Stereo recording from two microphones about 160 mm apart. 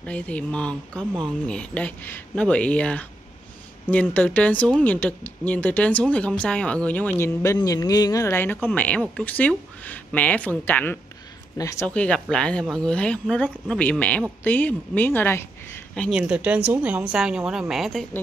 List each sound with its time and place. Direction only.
0.0 s speech: 10° left (ahead or behind)
16.2 s a woman's voice: 10° right (ahead or behind)